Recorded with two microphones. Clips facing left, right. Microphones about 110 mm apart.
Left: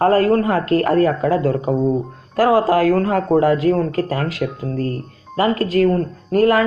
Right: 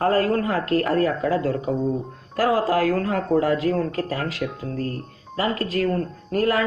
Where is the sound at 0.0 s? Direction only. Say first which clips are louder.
Left 6 dB; 55° left (ahead or behind).